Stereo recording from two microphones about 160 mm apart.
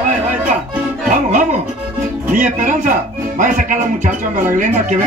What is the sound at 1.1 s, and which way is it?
Speech, 50° right (ahead or behind).